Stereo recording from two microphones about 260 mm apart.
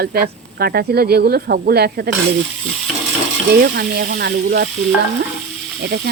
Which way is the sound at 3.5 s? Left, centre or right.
Right.